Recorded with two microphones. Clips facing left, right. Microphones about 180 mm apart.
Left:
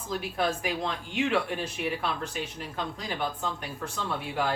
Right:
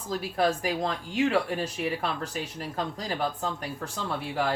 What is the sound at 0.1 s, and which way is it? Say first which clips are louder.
Speech: right 3 dB; 35° right (ahead or behind).